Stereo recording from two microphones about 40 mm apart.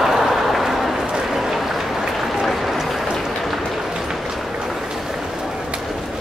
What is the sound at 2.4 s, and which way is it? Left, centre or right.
Applause, centre.